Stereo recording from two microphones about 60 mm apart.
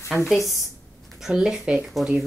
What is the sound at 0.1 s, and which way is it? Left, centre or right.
Speech, centre.